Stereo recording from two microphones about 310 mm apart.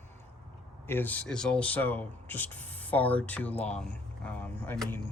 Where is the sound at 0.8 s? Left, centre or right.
Centre.